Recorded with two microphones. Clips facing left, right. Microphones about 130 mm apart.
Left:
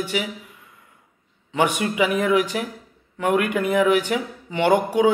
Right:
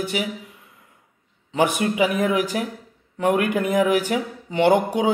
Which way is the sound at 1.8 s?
40° right (ahead or behind).